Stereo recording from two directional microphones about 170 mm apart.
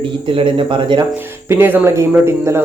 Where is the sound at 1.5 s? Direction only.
15° right (ahead or behind).